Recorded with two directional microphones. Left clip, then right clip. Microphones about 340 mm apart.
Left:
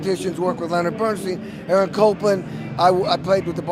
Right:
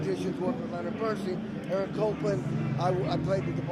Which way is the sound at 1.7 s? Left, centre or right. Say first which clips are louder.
Left 13 dB; left.